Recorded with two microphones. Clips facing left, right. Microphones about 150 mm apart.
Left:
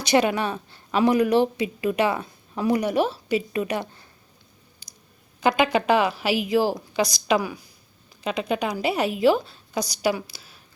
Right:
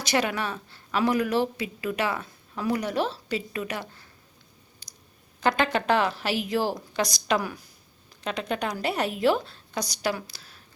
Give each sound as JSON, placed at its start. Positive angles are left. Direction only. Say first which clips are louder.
{"t": 0.0, "sound": "speech", "louder": "left 6 dB", "side_deg": 20}
{"t": 5.4, "sound": "a woman's voice", "louder": "left 4 dB", "side_deg": 10}